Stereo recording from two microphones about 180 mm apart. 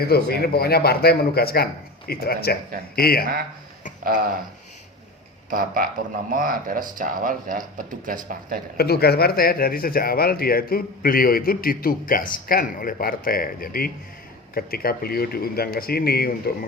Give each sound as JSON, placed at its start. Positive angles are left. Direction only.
{"t": 0.1, "sound": "speech", "side_deg": 65}
{"t": 4.0, "sound": "speech", "side_deg": -50}
{"t": 5.5, "sound": "speech", "side_deg": -50}
{"t": 8.8, "sound": "speech", "side_deg": 60}